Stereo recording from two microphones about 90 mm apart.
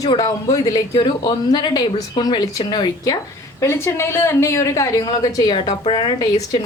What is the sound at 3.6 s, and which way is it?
A woman's voice, 30° left (ahead or behind).